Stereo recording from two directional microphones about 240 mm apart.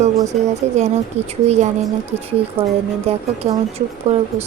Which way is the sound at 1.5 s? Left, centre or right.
Right.